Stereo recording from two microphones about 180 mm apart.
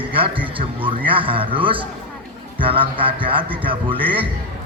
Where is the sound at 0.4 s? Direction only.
30° right (ahead or behind).